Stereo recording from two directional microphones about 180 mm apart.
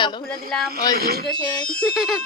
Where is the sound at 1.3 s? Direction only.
25° left (ahead or behind).